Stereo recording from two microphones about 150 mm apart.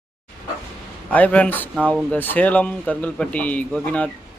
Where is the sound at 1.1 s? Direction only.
10° left (ahead or behind).